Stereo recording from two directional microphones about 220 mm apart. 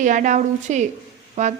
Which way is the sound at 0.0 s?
35° right (ahead or behind).